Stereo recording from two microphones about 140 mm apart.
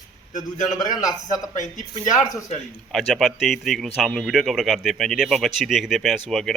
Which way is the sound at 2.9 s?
Centre (ahead or behind).